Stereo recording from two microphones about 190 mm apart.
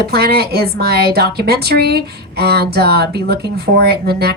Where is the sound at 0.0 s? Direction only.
55° right (ahead or behind).